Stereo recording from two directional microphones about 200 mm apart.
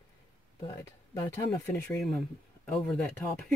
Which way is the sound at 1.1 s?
15° left (ahead or behind).